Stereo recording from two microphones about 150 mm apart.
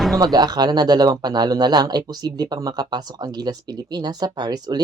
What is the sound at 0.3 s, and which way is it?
Speech, 25° right (ahead or behind).